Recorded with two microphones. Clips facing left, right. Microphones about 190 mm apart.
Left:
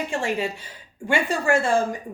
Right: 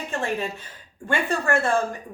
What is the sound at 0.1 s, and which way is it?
A woman's voice, 10° left (ahead or behind).